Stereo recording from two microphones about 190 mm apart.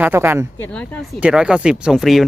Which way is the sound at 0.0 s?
10° right (ahead or behind).